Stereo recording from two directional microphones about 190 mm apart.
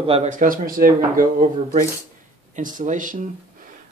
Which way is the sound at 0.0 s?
35° right (ahead or behind).